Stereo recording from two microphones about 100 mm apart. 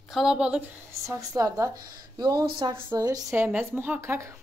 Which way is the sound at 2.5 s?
55° right (ahead or behind).